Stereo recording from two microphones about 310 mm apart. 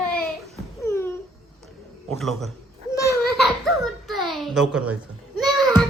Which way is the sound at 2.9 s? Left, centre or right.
Centre.